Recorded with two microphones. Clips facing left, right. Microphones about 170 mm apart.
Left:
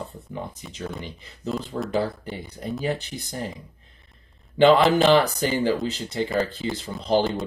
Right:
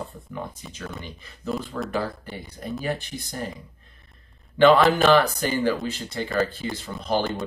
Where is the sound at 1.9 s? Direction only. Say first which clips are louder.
Left 3 dB; 15° left (ahead or behind).